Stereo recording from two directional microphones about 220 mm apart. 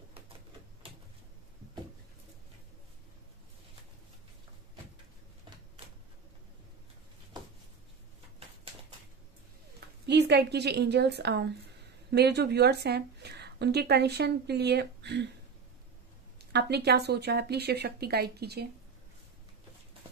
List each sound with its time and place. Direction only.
10.0 s speech: 50° right (ahead or behind)
16.3 s speech: 45° right (ahead or behind)